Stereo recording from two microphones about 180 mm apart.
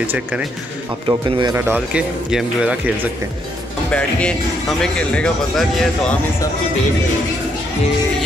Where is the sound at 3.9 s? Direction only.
5° left (ahead or behind).